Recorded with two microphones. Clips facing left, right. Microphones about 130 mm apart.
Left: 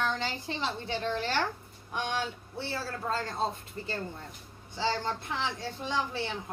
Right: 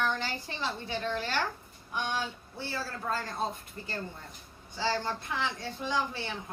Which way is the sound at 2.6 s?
25° left (ahead or behind).